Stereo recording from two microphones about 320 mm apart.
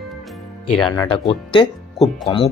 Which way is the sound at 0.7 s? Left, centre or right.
Centre.